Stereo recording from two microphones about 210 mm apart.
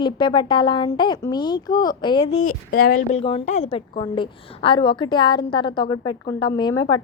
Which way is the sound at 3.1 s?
30° left (ahead or behind).